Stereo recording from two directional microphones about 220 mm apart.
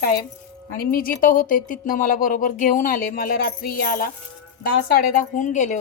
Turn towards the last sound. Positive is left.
turn(degrees=35)  # may be behind; listen again after turning